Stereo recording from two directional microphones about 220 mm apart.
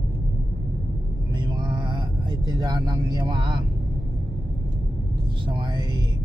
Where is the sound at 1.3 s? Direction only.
20° right (ahead or behind).